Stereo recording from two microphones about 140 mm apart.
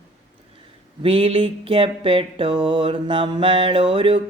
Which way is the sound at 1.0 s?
40° right (ahead or behind).